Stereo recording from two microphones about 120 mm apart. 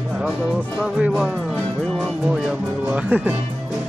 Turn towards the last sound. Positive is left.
turn(degrees=-10)  # may be behind; listen again after turning